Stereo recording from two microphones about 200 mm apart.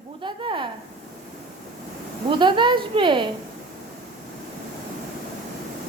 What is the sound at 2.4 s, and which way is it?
Speech, 25° right (ahead or behind).